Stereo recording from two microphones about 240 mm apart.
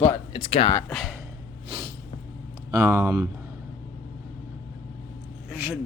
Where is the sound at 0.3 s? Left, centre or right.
Left.